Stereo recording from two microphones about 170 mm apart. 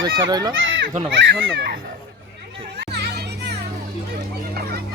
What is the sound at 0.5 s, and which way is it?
Speech, 90° right.